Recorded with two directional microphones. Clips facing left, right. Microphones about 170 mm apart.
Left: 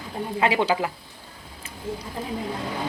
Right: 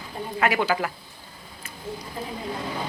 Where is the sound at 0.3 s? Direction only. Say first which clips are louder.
Left 1 dB; 25° left (ahead or behind).